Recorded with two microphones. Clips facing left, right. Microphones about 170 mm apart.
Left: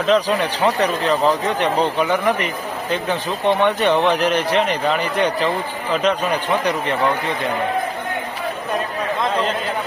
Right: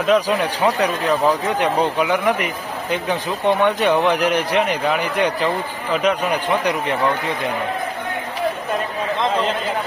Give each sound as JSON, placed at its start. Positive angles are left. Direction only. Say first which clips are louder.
{"t": 0.0, "sound": "a man's voice", "louder": "even", "side_deg": -10}
{"t": 3.6, "sound": "a man's voice", "louder": "even", "side_deg": -10}